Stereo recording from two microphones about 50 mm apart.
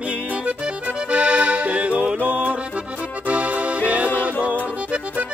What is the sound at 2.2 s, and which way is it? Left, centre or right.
Music, right.